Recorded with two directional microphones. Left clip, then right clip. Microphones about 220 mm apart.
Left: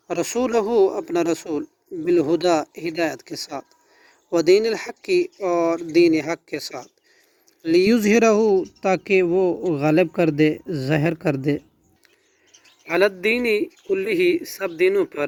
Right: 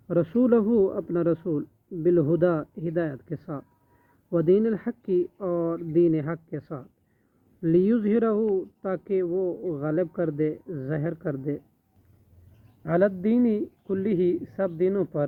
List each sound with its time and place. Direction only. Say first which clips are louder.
0.2 s speech: left 1 dB; 30° left (ahead or behind)
12.9 s speech: left 4 dB; 40° left (ahead or behind)